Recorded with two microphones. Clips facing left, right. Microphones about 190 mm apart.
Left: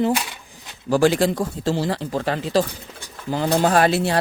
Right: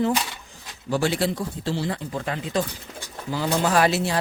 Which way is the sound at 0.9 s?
90° left.